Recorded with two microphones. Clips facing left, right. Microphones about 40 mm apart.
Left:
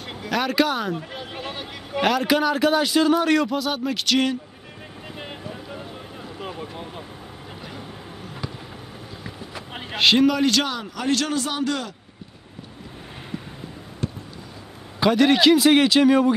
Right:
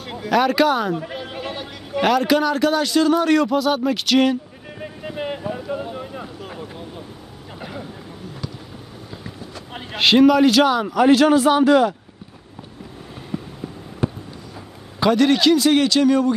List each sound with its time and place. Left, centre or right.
0.0 s speech: centre
5.1 s vehicle: centre
5.5 s boat: right
9.2 s run: centre
9.9 s a man's voice: centre
14.0 s a sound: centre
15.0 s a man's voice: centre